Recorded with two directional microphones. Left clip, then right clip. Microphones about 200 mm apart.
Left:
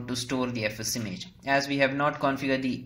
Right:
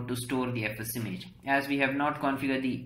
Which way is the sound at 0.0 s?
45° left (ahead or behind).